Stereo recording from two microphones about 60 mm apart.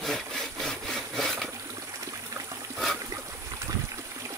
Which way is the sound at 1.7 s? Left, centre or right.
Right.